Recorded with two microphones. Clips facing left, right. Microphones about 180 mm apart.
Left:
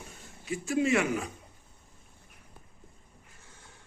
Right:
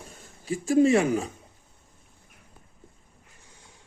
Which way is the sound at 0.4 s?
35° right (ahead or behind).